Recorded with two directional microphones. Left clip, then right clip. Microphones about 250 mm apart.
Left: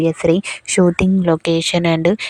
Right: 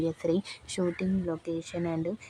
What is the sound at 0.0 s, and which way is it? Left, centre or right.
Speech, left.